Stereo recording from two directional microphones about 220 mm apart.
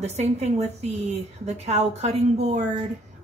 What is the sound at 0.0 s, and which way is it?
A woman's voice, 30° right (ahead or behind).